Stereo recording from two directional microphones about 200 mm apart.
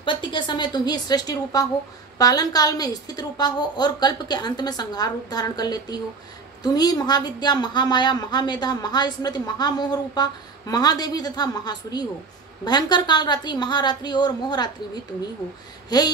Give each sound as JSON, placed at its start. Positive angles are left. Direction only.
{"t": 0.0, "sound": "a woman's voice", "side_deg": 25}
{"t": 15.9, "sound": "a woman's voice", "side_deg": 20}